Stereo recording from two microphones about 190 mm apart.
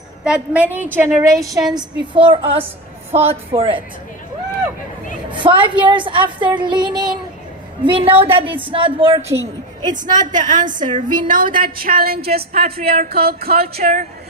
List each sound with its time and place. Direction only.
0.3 s a woman's voice: 5° right (ahead or behind)
1.5 s a woman's voice: centre (ahead or behind)
1.7 s a woman's voice: 25° right (ahead or behind)
5.3 s a woman's voice: 25° right (ahead or behind)
9.8 s a woman's voice: 40° right (ahead or behind)